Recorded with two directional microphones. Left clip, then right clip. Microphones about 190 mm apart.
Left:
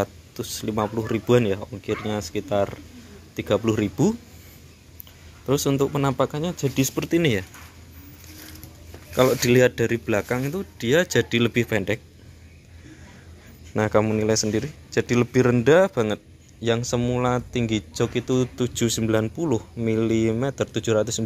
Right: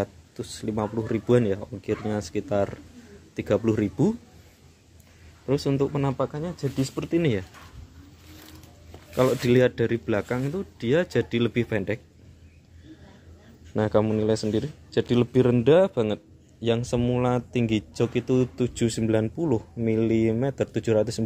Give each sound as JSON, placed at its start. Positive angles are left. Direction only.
{"t": 0.0, "sound": "speech", "side_deg": -10}
{"t": 5.5, "sound": "speech", "side_deg": 0}
{"t": 6.1, "sound": "speech", "side_deg": 15}
{"t": 7.2, "sound": "speech", "side_deg": -5}
{"t": 9.1, "sound": "speech", "side_deg": 0}
{"t": 13.7, "sound": "speech", "side_deg": -15}